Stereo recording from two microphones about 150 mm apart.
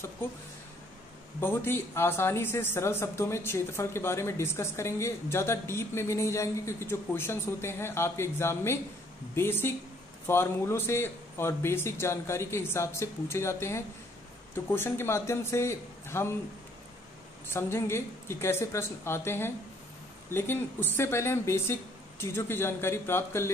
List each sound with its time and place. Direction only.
1.4 s speech: 15° left (ahead or behind)
17.5 s speech: 15° left (ahead or behind)